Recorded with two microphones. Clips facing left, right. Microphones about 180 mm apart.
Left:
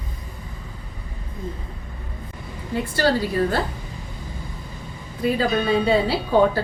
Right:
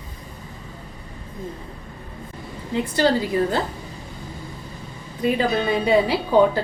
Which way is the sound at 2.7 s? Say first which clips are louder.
Right 1 dB; 20° right (ahead or behind).